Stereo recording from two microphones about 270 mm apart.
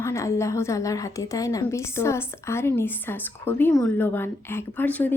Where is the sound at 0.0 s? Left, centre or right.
Centre.